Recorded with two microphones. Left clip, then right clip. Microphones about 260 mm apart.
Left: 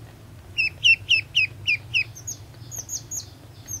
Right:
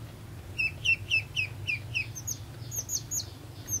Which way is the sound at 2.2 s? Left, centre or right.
Centre.